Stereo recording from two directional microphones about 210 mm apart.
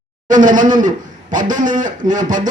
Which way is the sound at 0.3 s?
40° right (ahead or behind).